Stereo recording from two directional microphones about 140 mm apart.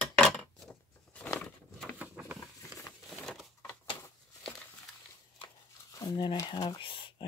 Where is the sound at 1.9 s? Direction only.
10° right (ahead or behind).